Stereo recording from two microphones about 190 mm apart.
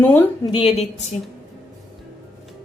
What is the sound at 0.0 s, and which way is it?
Speech, 10° left (ahead or behind).